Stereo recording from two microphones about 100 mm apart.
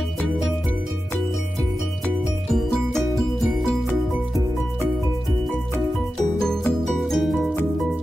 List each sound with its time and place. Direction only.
6.4 s music: 5° left (ahead or behind)